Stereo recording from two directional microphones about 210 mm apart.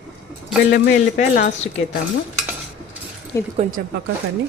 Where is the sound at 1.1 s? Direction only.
35° left (ahead or behind).